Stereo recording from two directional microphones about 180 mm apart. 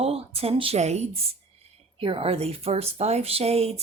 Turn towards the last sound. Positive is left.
turn(degrees=-35)  # may be behind; listen again after turning